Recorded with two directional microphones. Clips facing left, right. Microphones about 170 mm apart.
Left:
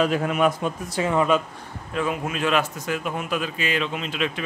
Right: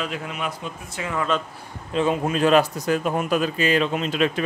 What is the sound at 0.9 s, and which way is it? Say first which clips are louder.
Speech: left 6 dB; 30° left (ahead or behind).